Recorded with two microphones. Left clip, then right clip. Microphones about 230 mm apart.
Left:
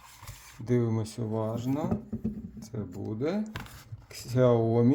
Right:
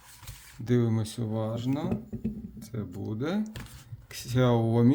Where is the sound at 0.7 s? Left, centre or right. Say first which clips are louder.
Right 1 dB; right.